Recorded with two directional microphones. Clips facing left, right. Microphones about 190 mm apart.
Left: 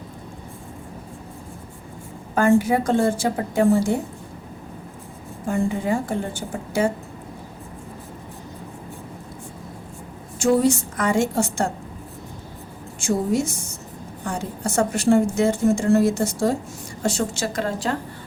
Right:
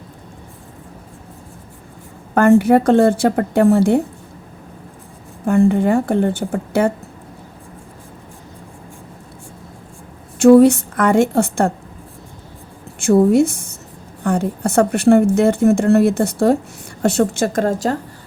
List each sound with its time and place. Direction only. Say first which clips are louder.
2.3 s a woman's voice: right 6 dB; 65° right (ahead or behind)
5.5 s a woman's voice: right 8 dB; 65° right (ahead or behind)
10.3 s a woman's voice: right 10 dB; 65° right (ahead or behind)
13.0 s a woman's voice: right 10 dB; 60° right (ahead or behind); by 17.9 s 45° right (ahead or behind)